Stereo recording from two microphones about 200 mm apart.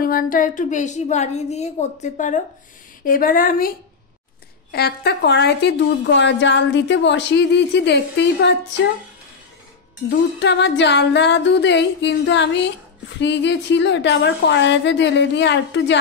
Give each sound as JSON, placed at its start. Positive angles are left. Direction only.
{"t": 0.0, "sound": "a woman's voice", "side_deg": 45}
{"t": 10.0, "sound": "a woman's voice", "side_deg": 60}